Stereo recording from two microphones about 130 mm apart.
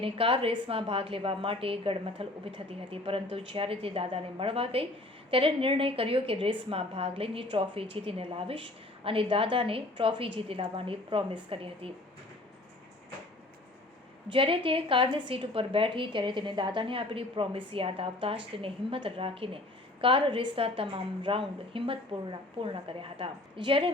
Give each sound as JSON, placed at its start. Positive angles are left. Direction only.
{"t": 0.0, "sound": "a woman's voice", "side_deg": -45}
{"t": 14.3, "sound": "a woman's voice", "side_deg": -40}